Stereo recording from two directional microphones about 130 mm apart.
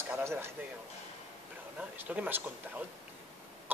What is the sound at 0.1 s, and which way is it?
Speech, 20° right (ahead or behind).